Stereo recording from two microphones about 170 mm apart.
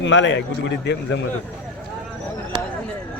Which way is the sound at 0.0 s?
90° left.